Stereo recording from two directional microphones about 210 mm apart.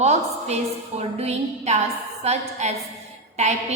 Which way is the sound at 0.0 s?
30° right (ahead or behind).